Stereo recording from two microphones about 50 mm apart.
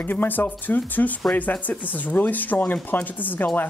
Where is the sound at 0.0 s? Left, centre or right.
Left.